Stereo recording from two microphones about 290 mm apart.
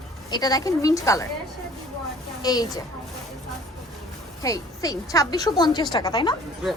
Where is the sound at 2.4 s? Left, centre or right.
Centre.